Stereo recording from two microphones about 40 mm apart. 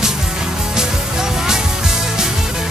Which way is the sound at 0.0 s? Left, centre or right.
Centre.